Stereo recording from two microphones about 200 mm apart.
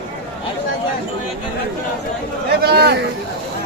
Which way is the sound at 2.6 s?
55° right (ahead or behind).